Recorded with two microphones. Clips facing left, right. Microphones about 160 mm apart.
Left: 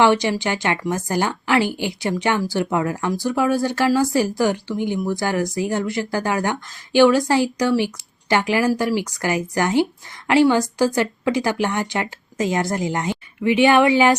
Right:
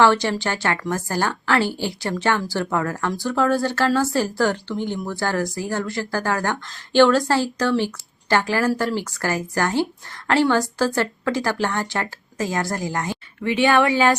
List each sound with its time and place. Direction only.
0.0 s a woman's voice: 20° left (ahead or behind)